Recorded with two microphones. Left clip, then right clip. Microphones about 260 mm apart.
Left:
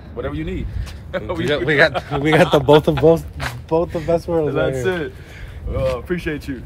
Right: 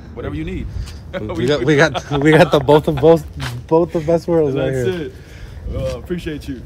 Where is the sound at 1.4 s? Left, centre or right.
Right.